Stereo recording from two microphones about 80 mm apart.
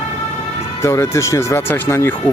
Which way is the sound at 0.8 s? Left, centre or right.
Left.